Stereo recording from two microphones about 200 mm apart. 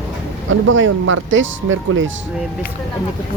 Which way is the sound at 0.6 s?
75° right (ahead or behind).